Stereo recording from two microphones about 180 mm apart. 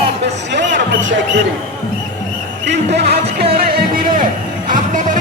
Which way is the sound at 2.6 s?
65° right (ahead or behind).